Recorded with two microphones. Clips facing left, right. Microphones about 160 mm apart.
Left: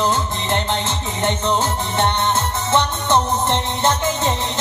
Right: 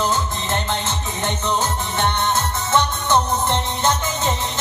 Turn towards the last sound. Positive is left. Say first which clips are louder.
# left 2 dB
turn(degrees=25)  # may be behind; listen again after turning